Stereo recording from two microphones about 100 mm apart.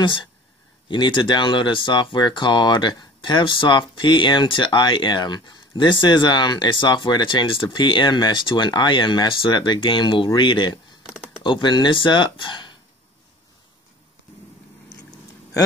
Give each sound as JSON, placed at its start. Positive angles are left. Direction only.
{"t": 0.0, "sound": "speech", "side_deg": 55}